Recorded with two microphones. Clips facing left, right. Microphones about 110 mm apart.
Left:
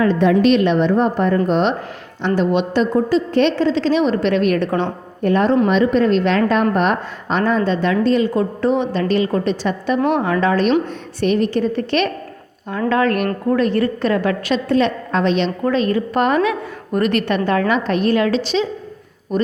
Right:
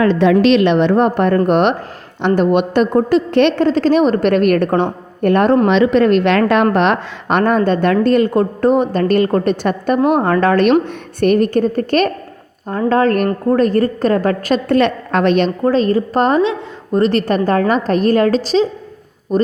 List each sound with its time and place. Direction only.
0.0 s a woman's voice: 85° right; by 5.6 s 55° right (ahead or behind)
5.6 s a woman's voice: 90° right; by 6.7 s 70° right (ahead or behind)
6.7 s a woman's voice: 90° right; by 14.8 s 45° right (ahead or behind)
14.8 s a woman's voice: 65° right (ahead or behind)
15.6 s a woman's voice: 35° right (ahead or behind)